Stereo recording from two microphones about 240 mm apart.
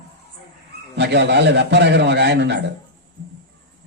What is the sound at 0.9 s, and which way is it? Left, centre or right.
A man's voice, right.